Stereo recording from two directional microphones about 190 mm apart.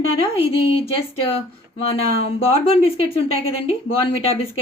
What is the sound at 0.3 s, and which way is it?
A woman's voice, 30° left (ahead or behind).